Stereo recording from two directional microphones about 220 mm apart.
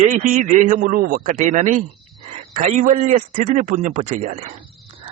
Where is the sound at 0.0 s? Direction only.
35° right (ahead or behind).